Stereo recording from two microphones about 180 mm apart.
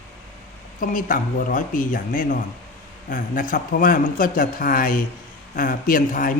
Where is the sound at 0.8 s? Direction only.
50° left (ahead or behind).